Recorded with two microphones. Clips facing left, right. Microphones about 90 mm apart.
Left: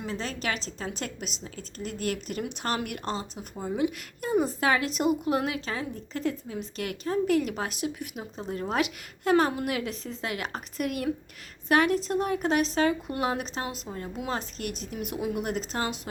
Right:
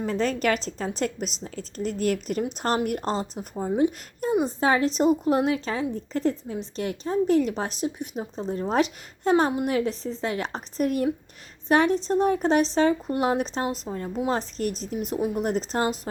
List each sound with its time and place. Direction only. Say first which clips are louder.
0.0 s a woman's voice: right 8 dB; 45° right (ahead or behind)
1.8 s a woman's voice: right 7 dB; 45° left (ahead or behind)
2.4 s speech: right 5 dB; 40° right (ahead or behind)
4.3 s speech: right 2 dB; 20° right (ahead or behind)
9.3 s speech: right 2 dB; 20° right (ahead or behind)
9.6 s speech: right 6 dB; 35° right (ahead or behind)